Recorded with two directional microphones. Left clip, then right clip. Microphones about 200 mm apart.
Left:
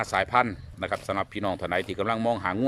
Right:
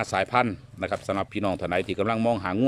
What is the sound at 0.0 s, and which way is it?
Speech, 10° right (ahead or behind).